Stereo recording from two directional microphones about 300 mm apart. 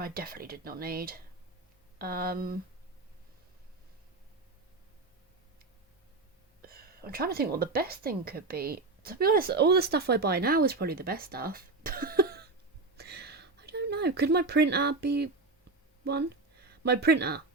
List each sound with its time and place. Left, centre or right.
0.0 s speech: right
6.6 s a woman's voice: right
13.0 s a sound: right
16.0 s speech: right